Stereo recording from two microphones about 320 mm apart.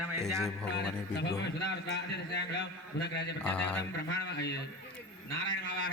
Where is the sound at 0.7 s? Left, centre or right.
Left.